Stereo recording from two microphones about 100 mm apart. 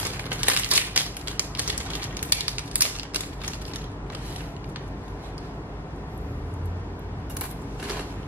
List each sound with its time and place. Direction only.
0.3 s typewriter: 15° right (ahead or behind)